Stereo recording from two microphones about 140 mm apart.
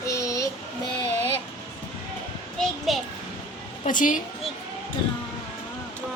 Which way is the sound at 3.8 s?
70° left (ahead or behind).